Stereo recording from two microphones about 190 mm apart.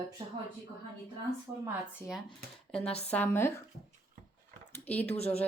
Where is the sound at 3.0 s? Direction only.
10° left (ahead or behind).